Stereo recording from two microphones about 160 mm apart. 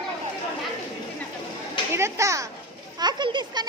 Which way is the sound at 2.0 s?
20° right (ahead or behind).